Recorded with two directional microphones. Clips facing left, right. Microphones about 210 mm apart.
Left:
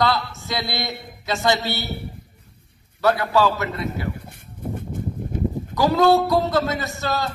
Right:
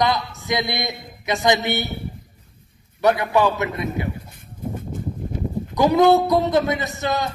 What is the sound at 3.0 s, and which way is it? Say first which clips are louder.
A man's voice: right 1 dB; 20° right (ahead or behind).